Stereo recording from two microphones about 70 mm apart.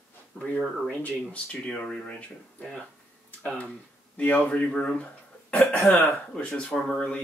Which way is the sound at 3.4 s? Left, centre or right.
Centre.